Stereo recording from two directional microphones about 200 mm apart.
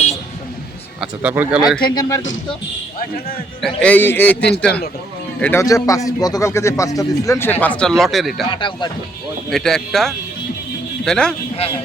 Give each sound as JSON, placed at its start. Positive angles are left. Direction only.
{"t": 1.0, "sound": "speech", "side_deg": -10}
{"t": 1.8, "sound": "a man's voice", "side_deg": 15}
{"t": 3.6, "sound": "a man's voice", "side_deg": 5}
{"t": 8.4, "sound": "speech", "side_deg": 25}
{"t": 9.5, "sound": "speech", "side_deg": 0}